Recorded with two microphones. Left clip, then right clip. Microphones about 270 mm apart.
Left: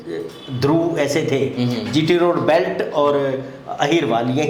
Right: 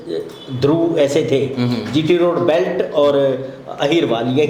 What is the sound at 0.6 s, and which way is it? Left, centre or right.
A man's voice, centre.